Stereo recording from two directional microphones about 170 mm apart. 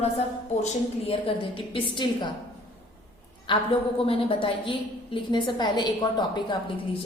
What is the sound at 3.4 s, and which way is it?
A woman's voice, 30° left (ahead or behind).